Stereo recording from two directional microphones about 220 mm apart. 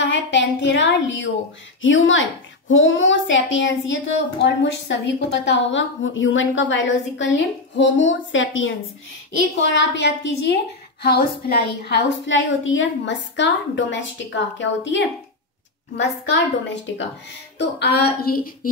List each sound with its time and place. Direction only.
0.0 s a woman's voice: 55° left (ahead or behind)
16.6 s a woman's voice: 55° left (ahead or behind)